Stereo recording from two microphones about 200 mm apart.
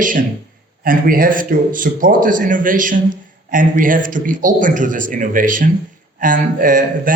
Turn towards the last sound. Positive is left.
turn(degrees=-40)  # may be behind; listen again after turning